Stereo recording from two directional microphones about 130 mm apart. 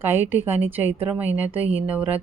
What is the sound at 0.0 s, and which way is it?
A woman's voice, 15° right (ahead or behind).